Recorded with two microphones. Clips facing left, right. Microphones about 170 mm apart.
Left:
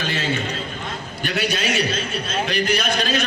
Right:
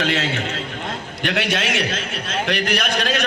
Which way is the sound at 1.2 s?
90° right.